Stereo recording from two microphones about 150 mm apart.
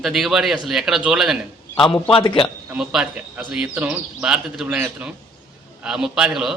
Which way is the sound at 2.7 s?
5° right (ahead or behind).